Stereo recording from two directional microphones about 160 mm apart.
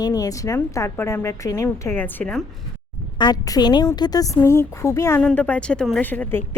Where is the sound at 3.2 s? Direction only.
25° left (ahead or behind).